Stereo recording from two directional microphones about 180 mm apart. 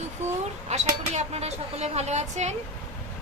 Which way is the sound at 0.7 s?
40° right (ahead or behind).